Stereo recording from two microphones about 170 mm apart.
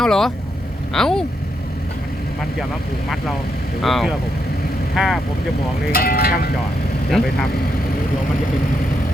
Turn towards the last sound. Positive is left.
turn(degrees=0)  # may be behind; listen again after turning